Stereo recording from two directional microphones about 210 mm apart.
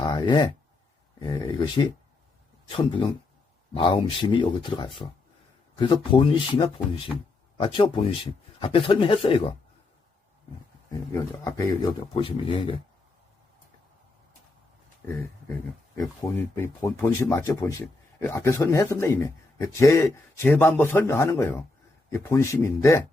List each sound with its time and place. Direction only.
0.0 s a sound: 20° left (ahead or behind)
1.2 s speech: 20° left (ahead or behind)
10.9 s speech: 15° left (ahead or behind)
16.0 s speech: 15° left (ahead or behind)